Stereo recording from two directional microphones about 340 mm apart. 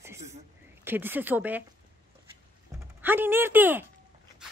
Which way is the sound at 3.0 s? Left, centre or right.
Centre.